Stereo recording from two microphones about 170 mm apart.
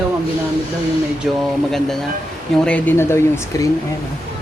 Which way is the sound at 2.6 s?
10° left (ahead or behind).